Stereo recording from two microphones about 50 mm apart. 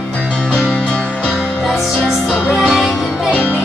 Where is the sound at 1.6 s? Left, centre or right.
Centre.